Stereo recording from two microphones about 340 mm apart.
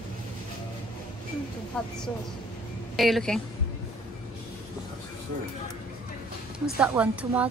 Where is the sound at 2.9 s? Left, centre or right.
Centre.